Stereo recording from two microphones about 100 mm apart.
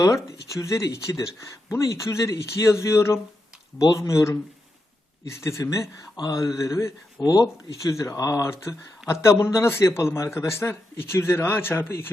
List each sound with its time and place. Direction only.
0.3 s a man's voice: 30° left (ahead or behind)
7.2 s speech: 45° left (ahead or behind)
7.7 s a man's voice: 35° left (ahead or behind)